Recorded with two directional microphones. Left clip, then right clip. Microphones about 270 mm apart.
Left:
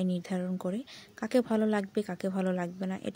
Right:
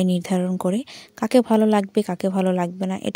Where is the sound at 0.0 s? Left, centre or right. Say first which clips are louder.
Right 11 dB; right.